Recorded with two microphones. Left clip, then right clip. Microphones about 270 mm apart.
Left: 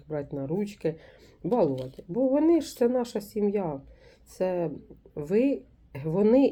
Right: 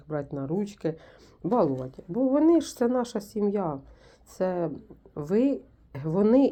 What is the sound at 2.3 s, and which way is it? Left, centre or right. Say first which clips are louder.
Speech: right 3 dB; centre.